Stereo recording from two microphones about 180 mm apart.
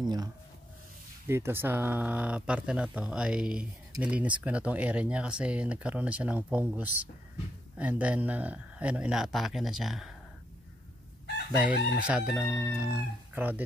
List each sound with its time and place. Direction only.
0.0 s speech: 25° right (ahead or behind); by 10.1 s centre (ahead or behind)
11.5 s chicken: 5° right (ahead or behind)
12.6 s speech: 5° right (ahead or behind)